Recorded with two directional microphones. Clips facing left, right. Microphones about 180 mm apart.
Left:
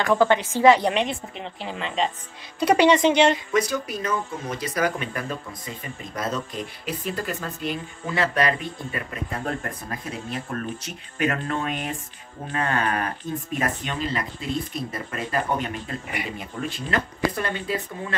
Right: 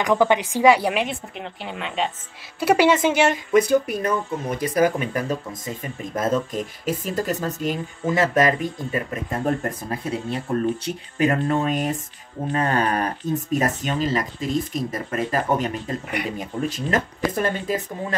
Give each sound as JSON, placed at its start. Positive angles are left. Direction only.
{"t": 0.0, "sound": "speech", "side_deg": -15}
{"t": 3.5, "sound": "speech", "side_deg": -55}
{"t": 9.8, "sound": "speech", "side_deg": -30}